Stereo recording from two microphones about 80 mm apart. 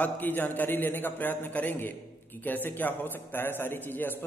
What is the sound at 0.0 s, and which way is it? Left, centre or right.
A man's voice, left.